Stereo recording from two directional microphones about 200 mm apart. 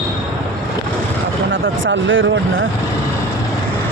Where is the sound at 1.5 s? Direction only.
70° right (ahead or behind).